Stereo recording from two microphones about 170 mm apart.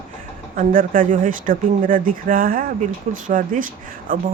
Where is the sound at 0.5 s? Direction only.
55° right (ahead or behind).